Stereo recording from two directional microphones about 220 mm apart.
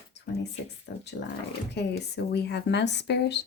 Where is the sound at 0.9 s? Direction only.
50° left (ahead or behind).